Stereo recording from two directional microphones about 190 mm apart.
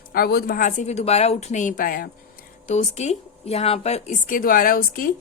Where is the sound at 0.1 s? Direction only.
55° left (ahead or behind).